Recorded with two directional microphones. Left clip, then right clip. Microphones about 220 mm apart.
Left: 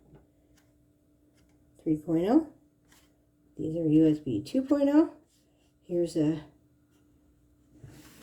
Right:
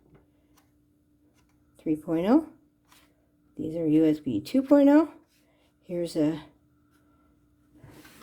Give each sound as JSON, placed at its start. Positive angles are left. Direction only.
{"t": 1.7, "sound": "speech", "side_deg": -35}
{"t": 3.7, "sound": "speech", "side_deg": -35}